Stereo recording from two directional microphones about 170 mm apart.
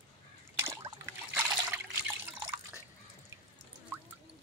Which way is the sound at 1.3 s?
15° right (ahead or behind).